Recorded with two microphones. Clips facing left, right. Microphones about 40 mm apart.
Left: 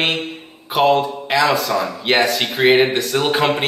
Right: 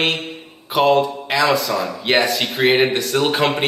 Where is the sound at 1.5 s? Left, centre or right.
Centre.